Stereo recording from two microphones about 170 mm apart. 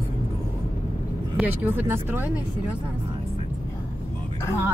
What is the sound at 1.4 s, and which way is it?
Speech, 10° right (ahead or behind).